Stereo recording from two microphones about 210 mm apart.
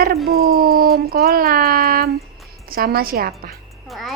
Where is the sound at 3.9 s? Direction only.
Centre (ahead or behind).